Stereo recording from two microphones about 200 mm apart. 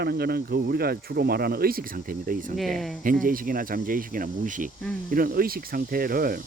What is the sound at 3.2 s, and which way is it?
Speech, 45° right (ahead or behind).